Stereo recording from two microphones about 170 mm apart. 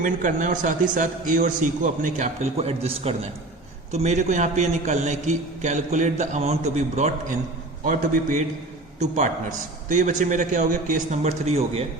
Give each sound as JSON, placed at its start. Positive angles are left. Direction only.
{"t": 0.0, "sound": "a man's voice", "side_deg": -50}